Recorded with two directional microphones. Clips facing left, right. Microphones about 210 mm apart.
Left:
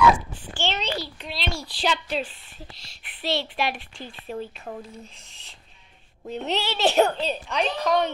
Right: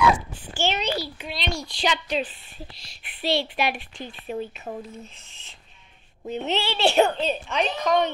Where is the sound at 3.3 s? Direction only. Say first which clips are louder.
Right 2 dB; 10° right (ahead or behind).